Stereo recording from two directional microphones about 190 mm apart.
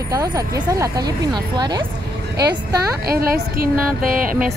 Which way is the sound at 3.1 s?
50° right (ahead or behind).